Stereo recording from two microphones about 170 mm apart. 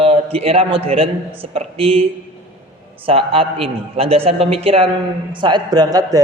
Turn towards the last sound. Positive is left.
turn(degrees=-20)  # may be behind; listen again after turning